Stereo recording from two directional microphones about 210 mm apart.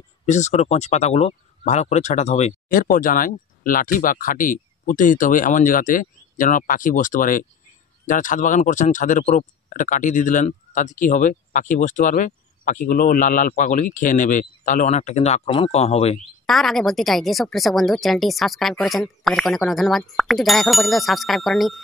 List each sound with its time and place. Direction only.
0.3 s speech: 35° left (ahead or behind)
16.4 s a woman's voice: centre (ahead or behind)